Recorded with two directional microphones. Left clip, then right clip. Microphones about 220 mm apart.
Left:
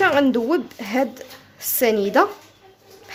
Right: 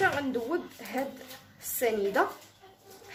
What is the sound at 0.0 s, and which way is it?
Speech, 50° left (ahead or behind).